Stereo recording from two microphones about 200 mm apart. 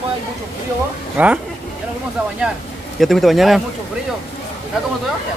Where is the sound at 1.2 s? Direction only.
10° right (ahead or behind).